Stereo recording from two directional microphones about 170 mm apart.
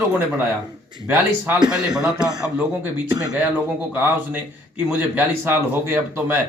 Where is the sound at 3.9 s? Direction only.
10° right (ahead or behind).